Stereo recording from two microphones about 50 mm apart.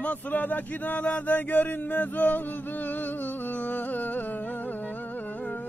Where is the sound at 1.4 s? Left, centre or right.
Left.